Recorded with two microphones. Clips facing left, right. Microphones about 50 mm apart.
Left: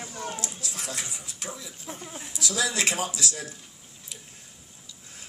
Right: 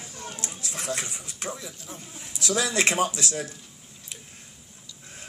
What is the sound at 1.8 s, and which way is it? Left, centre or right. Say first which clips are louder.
Speech: left 3 dB; left.